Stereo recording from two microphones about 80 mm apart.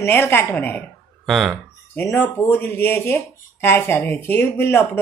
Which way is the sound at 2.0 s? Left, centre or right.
Left.